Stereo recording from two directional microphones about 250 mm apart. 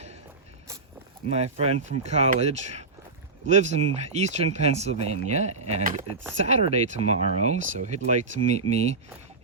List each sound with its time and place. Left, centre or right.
1.3 s speech: right